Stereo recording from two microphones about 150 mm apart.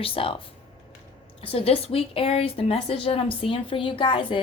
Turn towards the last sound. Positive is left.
turn(degrees=35)  # may be behind; listen again after turning